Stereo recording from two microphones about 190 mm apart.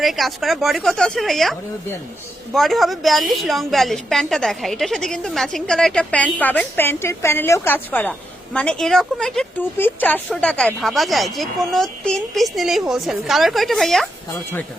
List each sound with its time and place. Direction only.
0.0 s a woman's voice: centre (ahead or behind)